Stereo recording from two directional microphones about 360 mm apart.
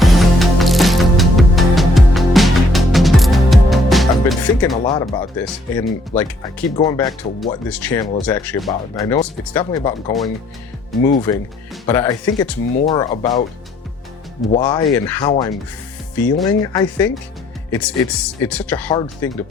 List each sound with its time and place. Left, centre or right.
0.0 s music: centre
4.8 s speech: centre
11.3 s speech: centre
14.5 s speech: centre